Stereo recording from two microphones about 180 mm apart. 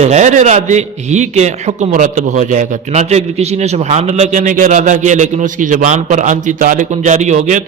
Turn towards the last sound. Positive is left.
turn(degrees=-40)  # may be behind; listen again after turning